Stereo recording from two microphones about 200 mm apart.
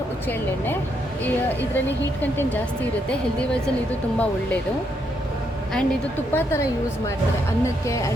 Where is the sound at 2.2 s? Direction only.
10° left (ahead or behind).